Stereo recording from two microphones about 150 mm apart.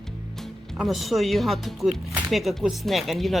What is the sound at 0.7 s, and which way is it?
Speech, centre (ahead or behind).